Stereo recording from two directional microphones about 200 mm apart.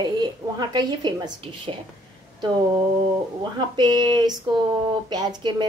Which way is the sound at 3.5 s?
20° right (ahead or behind).